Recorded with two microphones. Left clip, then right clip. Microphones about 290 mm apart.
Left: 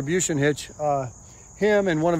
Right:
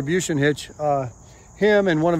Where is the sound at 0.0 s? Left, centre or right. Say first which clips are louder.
Right 2 dB; centre.